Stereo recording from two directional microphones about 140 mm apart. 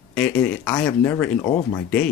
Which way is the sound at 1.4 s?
20° left (ahead or behind).